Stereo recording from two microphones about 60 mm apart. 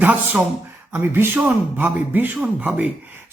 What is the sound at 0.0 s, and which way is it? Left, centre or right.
A man's voice, right.